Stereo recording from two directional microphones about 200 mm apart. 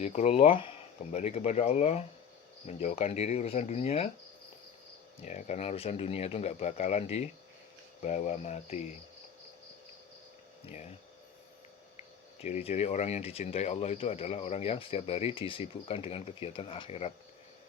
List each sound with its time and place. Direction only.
0.0 s speech: 35° left (ahead or behind)
5.2 s speech: 35° left (ahead or behind)
10.7 s speech: 35° left (ahead or behind)
11.9 s speech: 35° left (ahead or behind)